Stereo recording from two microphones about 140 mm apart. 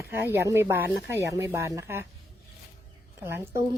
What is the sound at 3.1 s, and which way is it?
Speech, 15° right (ahead or behind).